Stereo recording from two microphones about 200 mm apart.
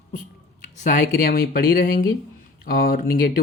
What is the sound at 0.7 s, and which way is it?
Speech, 40° left (ahead or behind).